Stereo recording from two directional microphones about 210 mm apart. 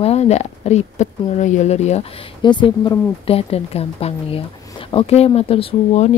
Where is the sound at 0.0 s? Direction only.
30° left (ahead or behind).